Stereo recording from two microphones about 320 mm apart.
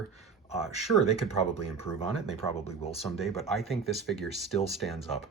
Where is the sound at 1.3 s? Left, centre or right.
Centre.